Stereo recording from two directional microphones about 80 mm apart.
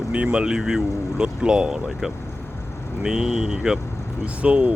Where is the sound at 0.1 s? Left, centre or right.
Centre.